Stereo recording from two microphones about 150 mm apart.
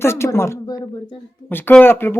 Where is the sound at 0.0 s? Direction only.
15° left (ahead or behind).